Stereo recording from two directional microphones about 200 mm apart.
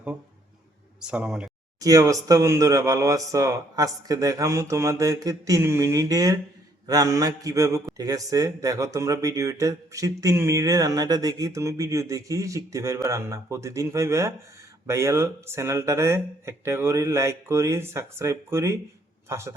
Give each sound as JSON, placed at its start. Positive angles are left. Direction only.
{"t": 1.0, "sound": "speech", "side_deg": -5}
{"t": 1.8, "sound": "speech", "side_deg": -15}